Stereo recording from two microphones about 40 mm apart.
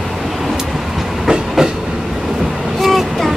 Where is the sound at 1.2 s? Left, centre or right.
Centre.